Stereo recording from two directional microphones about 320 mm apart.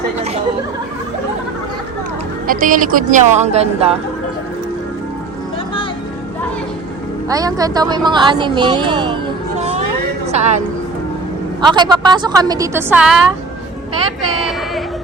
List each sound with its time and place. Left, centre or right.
2.5 s speech: right
7.3 s a woman's voice: centre
10.3 s speech: right
11.6 s a woman's voice: centre